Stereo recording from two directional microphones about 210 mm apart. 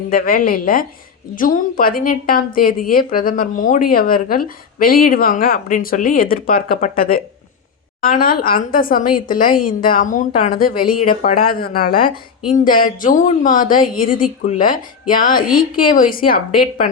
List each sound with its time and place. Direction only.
0.1 s a woman's voice: 45° left (ahead or behind)